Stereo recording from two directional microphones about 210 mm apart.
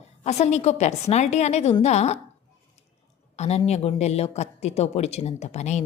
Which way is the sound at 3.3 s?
30° left (ahead or behind).